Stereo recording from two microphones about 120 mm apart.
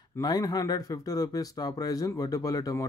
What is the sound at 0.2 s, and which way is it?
Speech, 35° left (ahead or behind).